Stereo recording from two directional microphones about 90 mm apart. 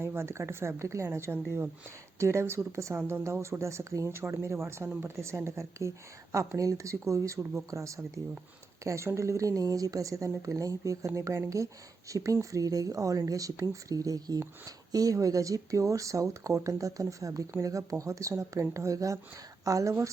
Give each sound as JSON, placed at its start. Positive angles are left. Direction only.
{"t": 0.0, "sound": "a woman's voice", "side_deg": -25}